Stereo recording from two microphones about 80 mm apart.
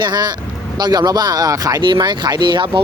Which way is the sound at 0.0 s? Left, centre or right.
Right.